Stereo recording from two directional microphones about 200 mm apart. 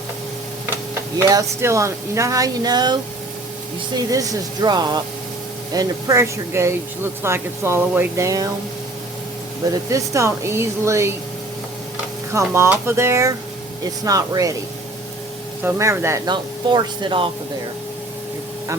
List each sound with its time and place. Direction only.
1.2 s speech: 15° right (ahead or behind)
9.9 s speech: 15° right (ahead or behind)
12.5 s speech: 10° right (ahead or behind)
15.6 s speech: 15° right (ahead or behind)